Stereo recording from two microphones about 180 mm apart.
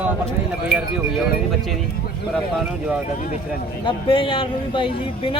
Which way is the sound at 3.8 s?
30° left (ahead or behind).